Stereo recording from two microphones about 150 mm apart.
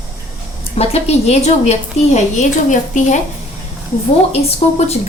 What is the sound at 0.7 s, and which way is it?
A woman's voice, 45° left (ahead or behind).